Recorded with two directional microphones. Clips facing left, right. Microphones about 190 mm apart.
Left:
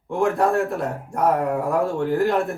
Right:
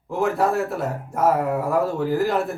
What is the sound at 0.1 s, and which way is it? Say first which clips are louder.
Speech: left 1 dB; centre (ahead or behind).